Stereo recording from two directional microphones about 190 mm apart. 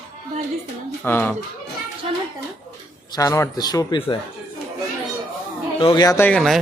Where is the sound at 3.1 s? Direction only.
15° left (ahead or behind).